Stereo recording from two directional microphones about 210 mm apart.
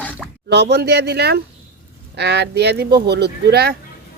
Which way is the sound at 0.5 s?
55° right (ahead or behind).